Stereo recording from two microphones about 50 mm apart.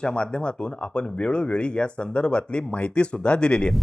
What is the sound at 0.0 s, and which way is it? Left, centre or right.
A man's voice, centre.